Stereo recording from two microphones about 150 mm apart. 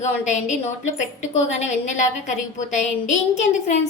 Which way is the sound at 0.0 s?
50° left (ahead or behind).